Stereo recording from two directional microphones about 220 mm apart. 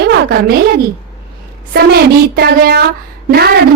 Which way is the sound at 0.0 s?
45° right (ahead or behind).